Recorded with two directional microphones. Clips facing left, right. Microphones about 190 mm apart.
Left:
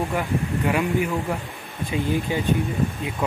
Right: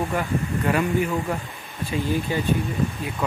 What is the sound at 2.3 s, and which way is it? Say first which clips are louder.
Speech: even; 15° left (ahead or behind).